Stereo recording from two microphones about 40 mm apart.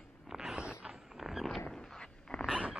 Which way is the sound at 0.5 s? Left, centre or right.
Right.